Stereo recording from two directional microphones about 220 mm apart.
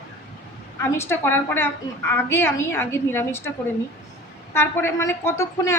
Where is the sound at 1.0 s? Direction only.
10° left (ahead or behind).